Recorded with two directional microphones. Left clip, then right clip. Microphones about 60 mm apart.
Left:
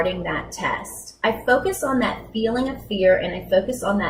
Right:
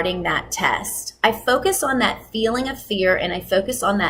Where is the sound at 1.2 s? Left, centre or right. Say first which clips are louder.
Right 1 dB; right.